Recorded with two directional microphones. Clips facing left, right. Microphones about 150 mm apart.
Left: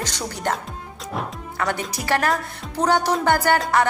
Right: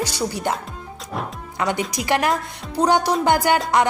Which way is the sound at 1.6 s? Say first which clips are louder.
Right 3 dB; 15° right (ahead or behind).